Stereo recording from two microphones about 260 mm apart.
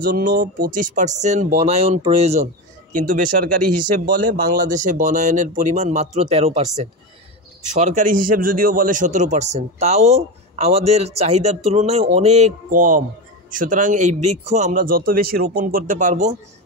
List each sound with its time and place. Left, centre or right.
0.0 s a man's voice: right